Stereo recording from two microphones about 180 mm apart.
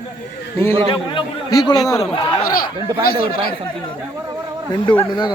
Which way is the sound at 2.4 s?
55° left (ahead or behind).